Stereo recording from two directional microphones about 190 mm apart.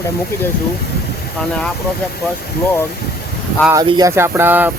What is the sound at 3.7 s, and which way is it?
Speech, 20° right (ahead or behind).